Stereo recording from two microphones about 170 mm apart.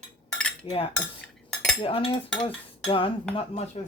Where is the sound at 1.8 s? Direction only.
30° left (ahead or behind).